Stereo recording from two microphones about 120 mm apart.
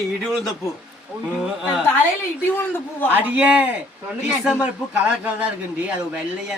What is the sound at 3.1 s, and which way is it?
Speech, 15° right (ahead or behind).